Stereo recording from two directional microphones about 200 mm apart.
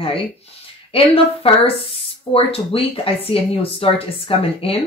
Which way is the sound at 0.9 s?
30° left (ahead or behind).